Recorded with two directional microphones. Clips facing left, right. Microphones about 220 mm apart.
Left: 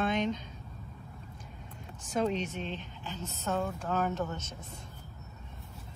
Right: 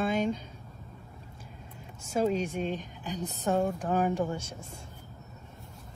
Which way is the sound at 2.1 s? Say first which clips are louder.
Right 3 dB; 5° right (ahead or behind).